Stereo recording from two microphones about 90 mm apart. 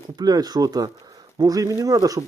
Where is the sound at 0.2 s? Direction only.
45° right (ahead or behind).